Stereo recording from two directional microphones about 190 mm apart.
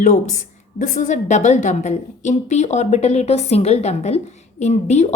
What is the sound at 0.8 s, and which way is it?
A woman's voice, 40° left (ahead or behind).